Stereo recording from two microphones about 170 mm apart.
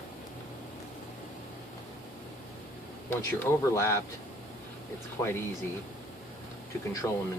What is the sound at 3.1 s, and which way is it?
Speech, 15° left (ahead or behind).